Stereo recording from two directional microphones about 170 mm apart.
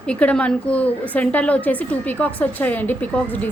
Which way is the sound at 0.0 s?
5° left (ahead or behind).